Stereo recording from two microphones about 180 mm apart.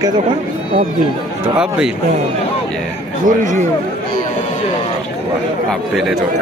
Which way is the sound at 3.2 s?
45° right (ahead or behind).